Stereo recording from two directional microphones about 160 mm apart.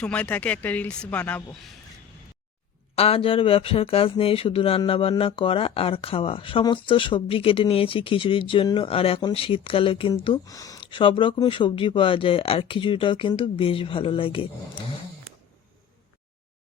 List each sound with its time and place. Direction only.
0.0 s speech: 5° left (ahead or behind)
2.9 s speech: 35° left (ahead or behind)